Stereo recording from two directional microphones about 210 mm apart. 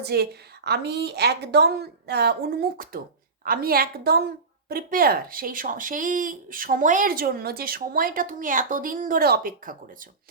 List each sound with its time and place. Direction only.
0.0 s a woman's voice: 50° right (ahead or behind)